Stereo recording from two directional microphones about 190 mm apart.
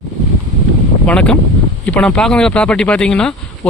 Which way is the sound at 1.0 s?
5° left (ahead or behind).